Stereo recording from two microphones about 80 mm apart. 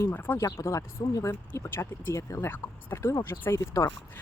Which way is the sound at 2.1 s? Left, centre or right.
Left.